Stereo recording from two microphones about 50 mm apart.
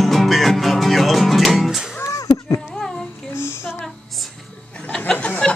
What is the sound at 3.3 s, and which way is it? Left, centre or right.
Music, left.